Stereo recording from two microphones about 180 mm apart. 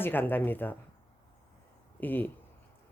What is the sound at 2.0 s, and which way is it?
Speech, 10° left (ahead or behind).